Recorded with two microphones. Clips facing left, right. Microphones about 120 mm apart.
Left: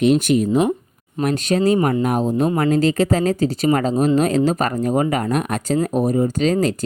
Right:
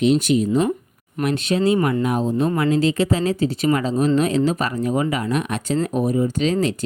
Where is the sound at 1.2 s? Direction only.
45° left (ahead or behind).